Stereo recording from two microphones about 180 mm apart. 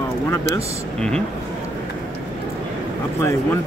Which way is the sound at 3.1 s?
15° left (ahead or behind).